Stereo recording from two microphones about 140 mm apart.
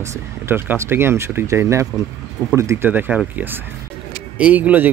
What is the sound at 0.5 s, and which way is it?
A man's voice, 15° right (ahead or behind).